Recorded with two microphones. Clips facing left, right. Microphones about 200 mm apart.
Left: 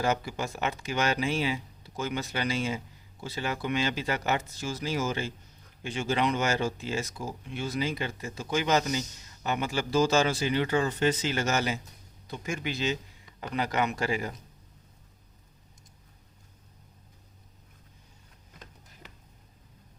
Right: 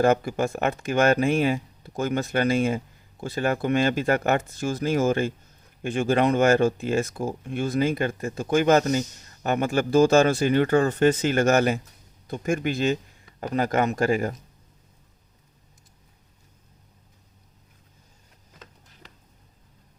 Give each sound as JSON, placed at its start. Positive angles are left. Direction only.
{"t": 0.0, "sound": "speech", "side_deg": -55}